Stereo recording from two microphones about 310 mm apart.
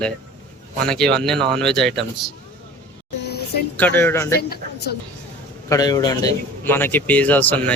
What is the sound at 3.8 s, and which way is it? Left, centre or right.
Speech, centre.